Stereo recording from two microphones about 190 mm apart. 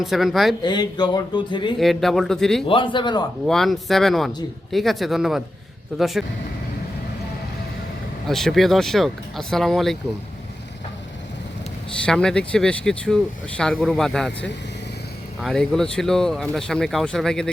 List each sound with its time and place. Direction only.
0.0 s speech: centre (ahead or behind)
0.6 s speech: 20° left (ahead or behind)
1.8 s speech: centre (ahead or behind)
2.6 s speech: 25° left (ahead or behind)
3.4 s speech: centre (ahead or behind)
8.3 s speech: centre (ahead or behind)
12.0 s speech: 5° left (ahead or behind)
15.4 s speech: centre (ahead or behind)